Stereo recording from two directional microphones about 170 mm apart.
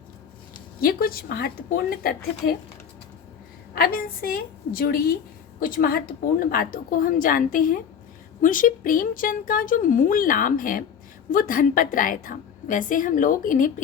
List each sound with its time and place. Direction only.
0.8 s a woman's voice: 60° left (ahead or behind)
3.8 s a woman's voice: 60° left (ahead or behind)